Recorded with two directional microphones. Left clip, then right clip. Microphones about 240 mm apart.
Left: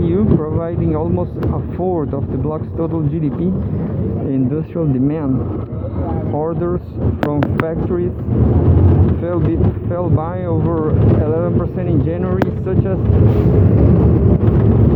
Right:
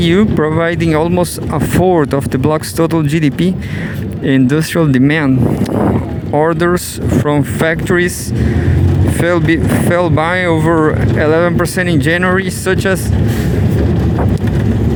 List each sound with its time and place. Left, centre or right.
0.0 s speech: right
6.3 s speech: right
7.3 s speech: right
9.2 s speech: right